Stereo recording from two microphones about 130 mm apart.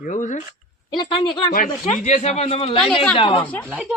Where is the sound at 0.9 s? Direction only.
35° left (ahead or behind).